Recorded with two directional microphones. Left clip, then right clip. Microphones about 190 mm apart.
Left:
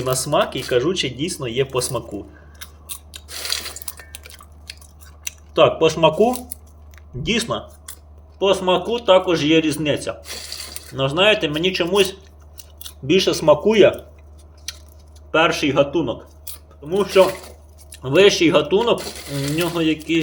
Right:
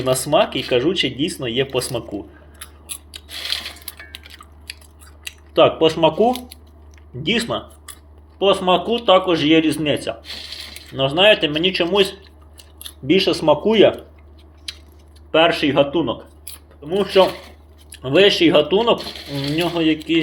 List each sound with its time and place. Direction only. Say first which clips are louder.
0.0 s speech: right 3 dB; 5° left (ahead or behind)
2.6 s scissors: even; 10° left (ahead or behind)
5.2 s speech: right 1 dB; 10° left (ahead or behind)
15.3 s speech: right 2 dB; 10° left (ahead or behind)